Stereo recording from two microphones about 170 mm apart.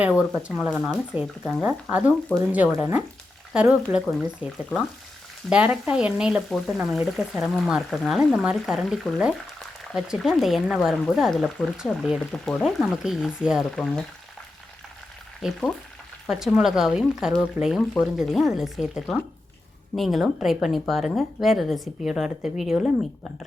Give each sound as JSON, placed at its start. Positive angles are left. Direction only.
{"t": 0.0, "sound": "speech", "side_deg": -5}
{"t": 3.5, "sound": "speech", "side_deg": -5}
{"t": 15.4, "sound": "speech", "side_deg": 0}